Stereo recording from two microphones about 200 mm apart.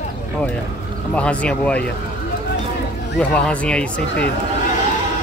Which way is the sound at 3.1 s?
5° left (ahead or behind).